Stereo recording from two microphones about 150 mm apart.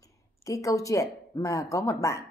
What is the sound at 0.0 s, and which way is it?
Speech, 20° left (ahead or behind).